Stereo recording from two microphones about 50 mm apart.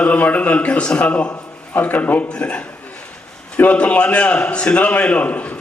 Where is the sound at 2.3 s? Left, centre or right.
Left.